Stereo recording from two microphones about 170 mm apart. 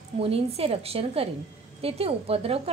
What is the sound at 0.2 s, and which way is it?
A woman's voice, 35° right (ahead or behind).